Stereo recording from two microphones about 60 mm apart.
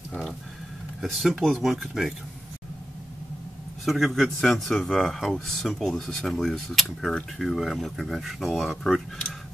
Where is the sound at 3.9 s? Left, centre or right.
Centre.